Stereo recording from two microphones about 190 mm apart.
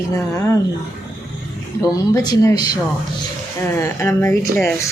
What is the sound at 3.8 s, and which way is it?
Speech, 15° left (ahead or behind).